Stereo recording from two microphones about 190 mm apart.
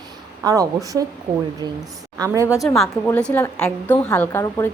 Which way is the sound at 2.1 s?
15° right (ahead or behind).